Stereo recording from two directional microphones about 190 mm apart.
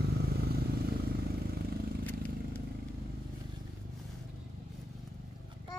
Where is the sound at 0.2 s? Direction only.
55° right (ahead or behind).